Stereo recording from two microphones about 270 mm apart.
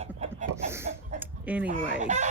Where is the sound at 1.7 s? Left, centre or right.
Right.